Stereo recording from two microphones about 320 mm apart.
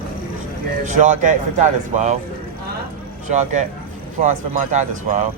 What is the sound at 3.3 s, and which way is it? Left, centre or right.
Speech, right.